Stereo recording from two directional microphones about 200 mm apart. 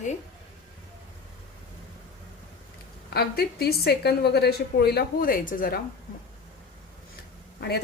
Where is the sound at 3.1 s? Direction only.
50° left (ahead or behind).